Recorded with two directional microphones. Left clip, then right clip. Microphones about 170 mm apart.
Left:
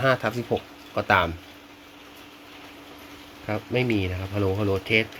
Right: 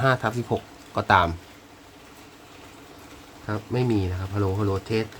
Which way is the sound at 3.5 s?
10° right (ahead or behind).